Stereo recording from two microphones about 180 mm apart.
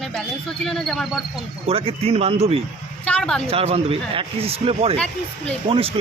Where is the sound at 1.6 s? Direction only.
30° right (ahead or behind).